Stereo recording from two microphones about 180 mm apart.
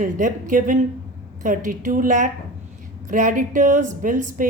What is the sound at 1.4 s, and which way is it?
A woman's voice, 45° right (ahead or behind).